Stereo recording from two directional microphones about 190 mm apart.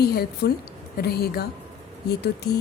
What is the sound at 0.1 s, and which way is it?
A woman's voice, 55° left (ahead or behind).